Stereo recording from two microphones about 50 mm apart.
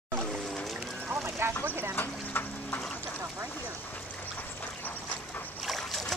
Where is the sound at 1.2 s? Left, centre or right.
Right.